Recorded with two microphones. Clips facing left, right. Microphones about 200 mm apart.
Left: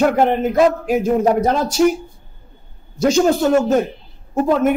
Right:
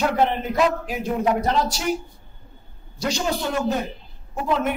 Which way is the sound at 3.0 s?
50° left (ahead or behind).